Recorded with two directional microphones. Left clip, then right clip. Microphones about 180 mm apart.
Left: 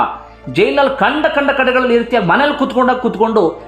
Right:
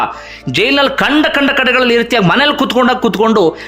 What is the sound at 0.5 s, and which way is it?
A man's voice, 20° right (ahead or behind).